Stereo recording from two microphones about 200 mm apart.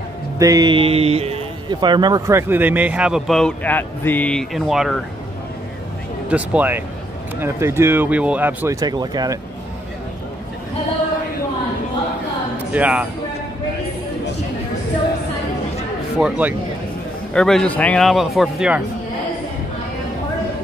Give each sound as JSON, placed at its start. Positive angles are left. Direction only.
{"t": 0.4, "sound": "speech", "side_deg": -20}
{"t": 6.2, "sound": "speech", "side_deg": -5}
{"t": 12.7, "sound": "speech", "side_deg": -5}
{"t": 16.2, "sound": "a man's voice", "side_deg": -5}